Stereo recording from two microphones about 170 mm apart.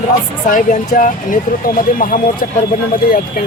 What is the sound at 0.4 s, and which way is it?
Speech, 50° left (ahead or behind).